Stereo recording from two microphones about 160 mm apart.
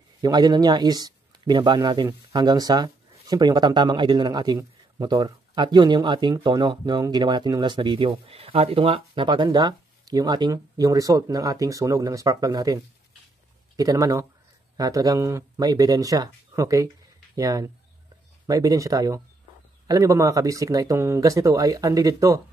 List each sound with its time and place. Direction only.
0.2 s speech: 25° right (ahead or behind)